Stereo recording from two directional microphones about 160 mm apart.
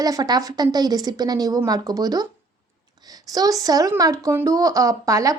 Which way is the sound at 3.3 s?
25° right (ahead or behind).